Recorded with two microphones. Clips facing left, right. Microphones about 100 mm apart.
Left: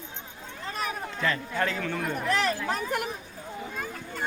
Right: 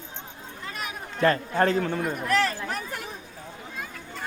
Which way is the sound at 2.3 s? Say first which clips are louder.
Right 1 dB; 20° left (ahead or behind).